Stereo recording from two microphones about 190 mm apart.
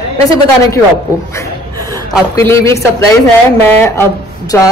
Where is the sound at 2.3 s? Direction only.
15° left (ahead or behind).